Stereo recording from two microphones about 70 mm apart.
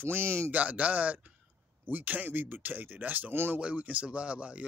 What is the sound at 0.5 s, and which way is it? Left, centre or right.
Speech, right.